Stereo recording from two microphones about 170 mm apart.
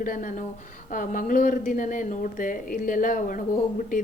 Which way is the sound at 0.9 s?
50° left (ahead or behind).